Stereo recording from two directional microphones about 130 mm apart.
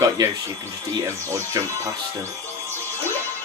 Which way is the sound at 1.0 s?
25° right (ahead or behind).